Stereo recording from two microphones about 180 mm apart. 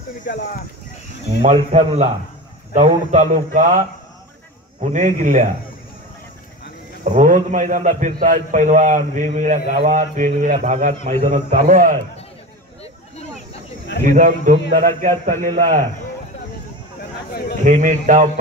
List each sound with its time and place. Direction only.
0.2 s speech: 55° left (ahead or behind)
1.4 s a man's voice: 40° right (ahead or behind)
7.1 s a man's voice: 45° right (ahead or behind)
14.0 s a man's voice: 45° right (ahead or behind)
17.3 s a man's voice: 60° left (ahead or behind)
17.6 s a man's voice: 45° right (ahead or behind)